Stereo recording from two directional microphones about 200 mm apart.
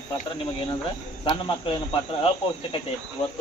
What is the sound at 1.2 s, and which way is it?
Speech, 25° left (ahead or behind).